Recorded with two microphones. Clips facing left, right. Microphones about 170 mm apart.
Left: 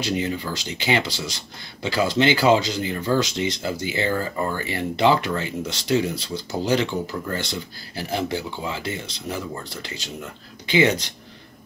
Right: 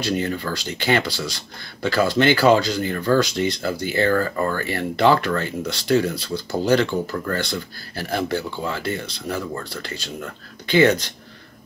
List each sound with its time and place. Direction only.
0.0 s speech: 15° left (ahead or behind)